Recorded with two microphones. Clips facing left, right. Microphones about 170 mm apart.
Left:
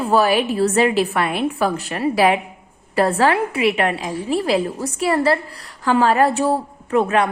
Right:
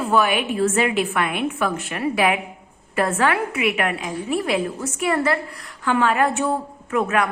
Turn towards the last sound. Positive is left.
turn(degrees=30)  # may be behind; listen again after turning